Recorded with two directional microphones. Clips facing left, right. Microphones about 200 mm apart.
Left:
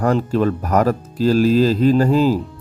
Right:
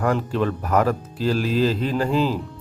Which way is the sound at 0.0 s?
40° left (ahead or behind).